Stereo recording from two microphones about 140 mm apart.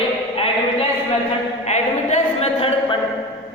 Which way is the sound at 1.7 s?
55° left (ahead or behind).